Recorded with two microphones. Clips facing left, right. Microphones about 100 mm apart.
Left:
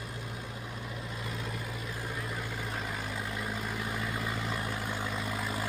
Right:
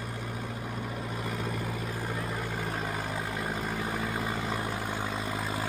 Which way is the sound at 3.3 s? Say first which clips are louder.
Right 3 dB; 40° right (ahead or behind).